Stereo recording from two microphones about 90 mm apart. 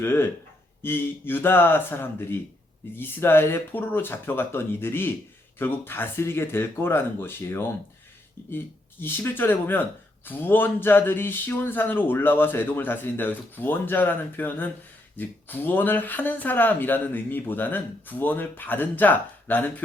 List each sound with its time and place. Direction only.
0.0 s speech: 25° left (ahead or behind)